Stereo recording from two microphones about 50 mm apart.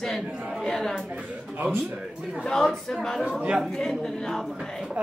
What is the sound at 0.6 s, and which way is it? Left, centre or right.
Speech, centre.